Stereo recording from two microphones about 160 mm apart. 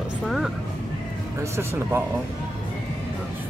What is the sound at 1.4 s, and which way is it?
Speech, 15° right (ahead or behind).